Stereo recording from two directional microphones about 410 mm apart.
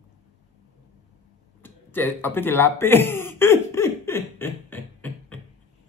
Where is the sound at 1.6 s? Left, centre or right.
Centre.